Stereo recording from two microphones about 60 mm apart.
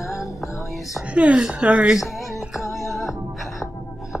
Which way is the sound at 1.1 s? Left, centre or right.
Right.